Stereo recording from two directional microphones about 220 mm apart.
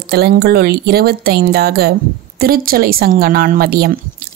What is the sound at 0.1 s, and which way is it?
A woman's voice, 45° right (ahead or behind).